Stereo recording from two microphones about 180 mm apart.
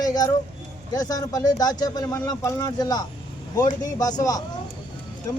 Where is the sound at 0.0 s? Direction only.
20° left (ahead or behind).